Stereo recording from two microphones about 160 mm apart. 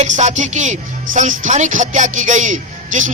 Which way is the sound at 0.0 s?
45° right (ahead or behind).